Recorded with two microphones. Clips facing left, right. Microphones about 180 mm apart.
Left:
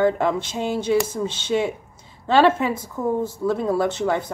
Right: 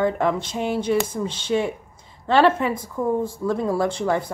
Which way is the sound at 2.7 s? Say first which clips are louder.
Even; 25° left (ahead or behind).